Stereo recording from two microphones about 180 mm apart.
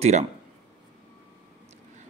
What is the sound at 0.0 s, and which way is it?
Speech, 35° right (ahead or behind).